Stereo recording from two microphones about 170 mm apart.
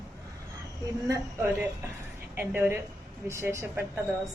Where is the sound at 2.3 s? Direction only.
15° right (ahead or behind).